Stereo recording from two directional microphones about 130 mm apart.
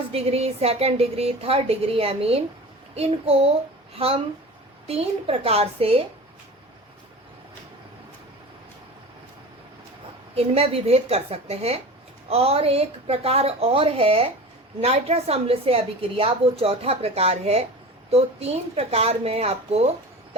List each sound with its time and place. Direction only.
0.1 s a woman's voice: 50° right (ahead or behind)
2.9 s a sound: 50° right (ahead or behind)
4.9 s a woman's voice: 50° right (ahead or behind)
10.3 s a woman's voice: 50° right (ahead or behind)